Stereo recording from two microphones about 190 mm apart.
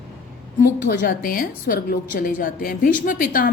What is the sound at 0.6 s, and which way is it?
A woman's voice, 50° left (ahead or behind).